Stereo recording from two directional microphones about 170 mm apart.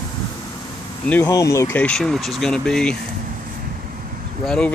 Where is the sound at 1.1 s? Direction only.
15° left (ahead or behind).